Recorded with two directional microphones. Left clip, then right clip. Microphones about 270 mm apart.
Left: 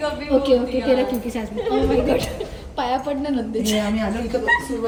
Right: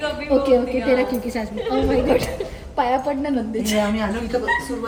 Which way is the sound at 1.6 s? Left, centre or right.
Centre.